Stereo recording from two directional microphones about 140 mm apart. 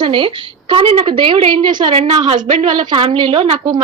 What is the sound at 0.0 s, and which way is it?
A woman's voice, 35° right (ahead or behind).